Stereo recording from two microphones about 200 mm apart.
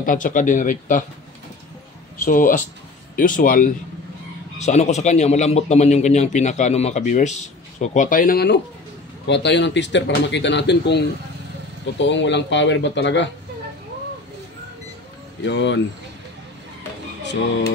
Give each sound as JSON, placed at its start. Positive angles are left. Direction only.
{"t": 0.0, "sound": "a man's voice", "side_deg": 40}
{"t": 2.2, "sound": "a man's voice", "side_deg": 40}
{"t": 9.2, "sound": "speech", "side_deg": 60}
{"t": 12.0, "sound": "speech", "side_deg": 65}
{"t": 15.4, "sound": "speech", "side_deg": 65}
{"t": 17.2, "sound": "speech", "side_deg": 60}